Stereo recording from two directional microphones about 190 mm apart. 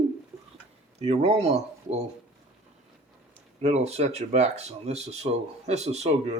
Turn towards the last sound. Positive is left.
turn(degrees=-35)  # may be behind; listen again after turning